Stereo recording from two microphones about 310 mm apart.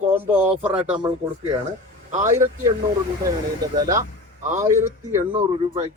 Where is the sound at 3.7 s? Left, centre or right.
Centre.